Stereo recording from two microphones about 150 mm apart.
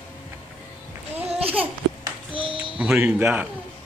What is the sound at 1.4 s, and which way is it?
Babbling, 40° right (ahead or behind).